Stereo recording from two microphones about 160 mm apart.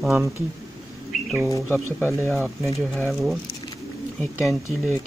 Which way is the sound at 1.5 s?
15° left (ahead or behind).